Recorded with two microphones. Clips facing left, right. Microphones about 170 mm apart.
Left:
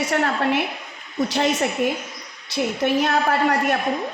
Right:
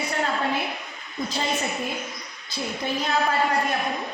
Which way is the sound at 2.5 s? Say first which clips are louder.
Left 8 dB; 70° left (ahead or behind).